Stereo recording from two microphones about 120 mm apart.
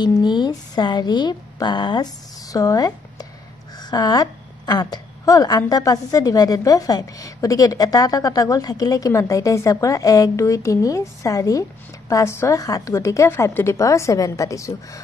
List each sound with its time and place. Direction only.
0.0 s a woman's voice: 40° left (ahead or behind)